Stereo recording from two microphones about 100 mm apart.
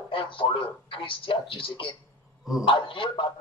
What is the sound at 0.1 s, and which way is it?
A man's voice, 60° left (ahead or behind).